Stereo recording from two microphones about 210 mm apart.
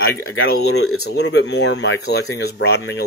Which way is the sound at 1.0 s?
55° left (ahead or behind).